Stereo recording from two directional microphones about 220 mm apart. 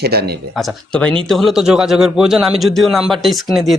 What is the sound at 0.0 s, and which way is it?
Speech, 45° right (ahead or behind).